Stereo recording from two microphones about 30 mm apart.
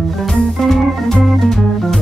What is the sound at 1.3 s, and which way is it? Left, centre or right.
Organ, centre.